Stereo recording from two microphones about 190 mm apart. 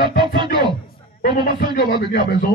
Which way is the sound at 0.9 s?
50° left (ahead or behind).